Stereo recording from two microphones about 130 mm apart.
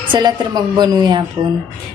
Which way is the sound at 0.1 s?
35° right (ahead or behind).